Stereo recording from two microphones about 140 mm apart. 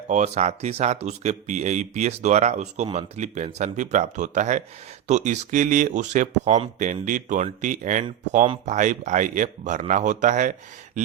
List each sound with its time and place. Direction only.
0.1 s speech: 55° right (ahead or behind)